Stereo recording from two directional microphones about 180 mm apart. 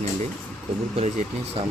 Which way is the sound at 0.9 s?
35° right (ahead or behind).